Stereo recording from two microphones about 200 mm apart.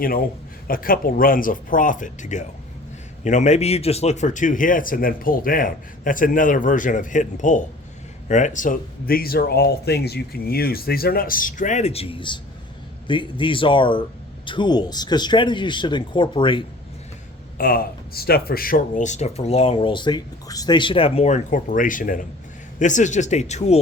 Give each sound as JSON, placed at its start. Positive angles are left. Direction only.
{"t": 0.7, "sound": "speech", "side_deg": 45}
{"t": 17.6, "sound": "speech", "side_deg": 45}